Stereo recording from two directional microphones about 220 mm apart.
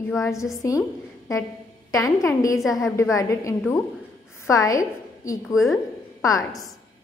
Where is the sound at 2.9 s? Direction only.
15° left (ahead or behind).